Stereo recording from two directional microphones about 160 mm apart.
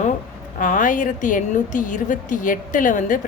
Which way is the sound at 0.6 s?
55° left (ahead or behind).